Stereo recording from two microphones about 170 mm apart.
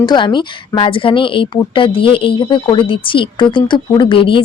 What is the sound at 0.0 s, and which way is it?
Speech, 25° left (ahead or behind).